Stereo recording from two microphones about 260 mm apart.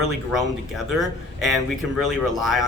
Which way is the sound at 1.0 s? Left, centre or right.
Centre.